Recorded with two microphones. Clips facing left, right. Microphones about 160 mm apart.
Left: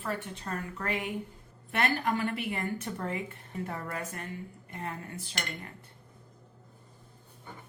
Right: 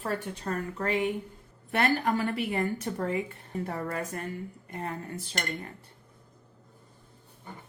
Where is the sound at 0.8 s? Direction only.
30° right (ahead or behind).